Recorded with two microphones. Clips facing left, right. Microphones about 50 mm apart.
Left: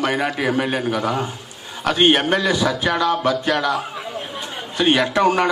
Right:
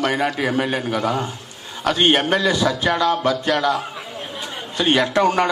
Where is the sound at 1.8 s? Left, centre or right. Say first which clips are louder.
Left 1 dB; centre.